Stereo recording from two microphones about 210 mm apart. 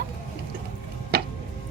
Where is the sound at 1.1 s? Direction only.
50° right (ahead or behind).